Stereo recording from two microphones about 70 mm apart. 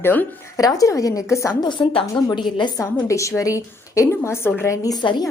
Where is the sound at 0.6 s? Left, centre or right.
Left.